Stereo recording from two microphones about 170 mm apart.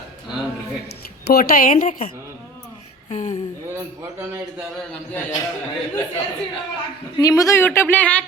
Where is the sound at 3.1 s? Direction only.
45° left (ahead or behind).